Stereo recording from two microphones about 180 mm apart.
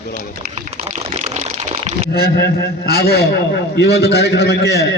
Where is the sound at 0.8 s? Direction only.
35° right (ahead or behind).